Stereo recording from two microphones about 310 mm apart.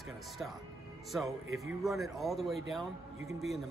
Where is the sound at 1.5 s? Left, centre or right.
Centre.